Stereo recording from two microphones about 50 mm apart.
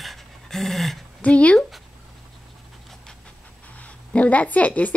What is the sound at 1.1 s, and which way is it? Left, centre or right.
Speech, left.